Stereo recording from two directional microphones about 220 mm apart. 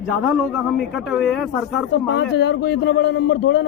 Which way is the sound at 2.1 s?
50° left (ahead or behind).